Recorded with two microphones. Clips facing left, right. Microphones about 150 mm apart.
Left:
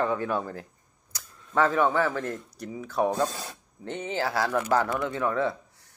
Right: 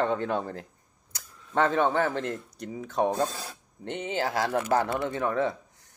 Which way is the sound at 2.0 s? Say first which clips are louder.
Even; 25° right (ahead or behind).